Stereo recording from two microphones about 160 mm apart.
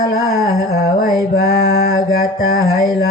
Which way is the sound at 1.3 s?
75° left (ahead or behind).